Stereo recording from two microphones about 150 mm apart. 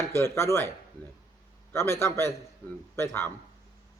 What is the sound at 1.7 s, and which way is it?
Speech, 15° left (ahead or behind).